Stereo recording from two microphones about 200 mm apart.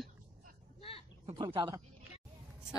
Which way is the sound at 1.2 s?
25° right (ahead or behind).